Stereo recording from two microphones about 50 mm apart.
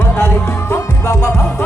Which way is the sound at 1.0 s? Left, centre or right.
Left.